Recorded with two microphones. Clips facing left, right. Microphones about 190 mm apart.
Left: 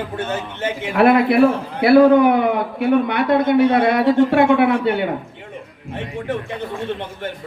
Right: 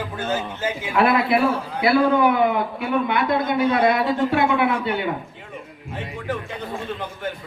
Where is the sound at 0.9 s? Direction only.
65° left (ahead or behind).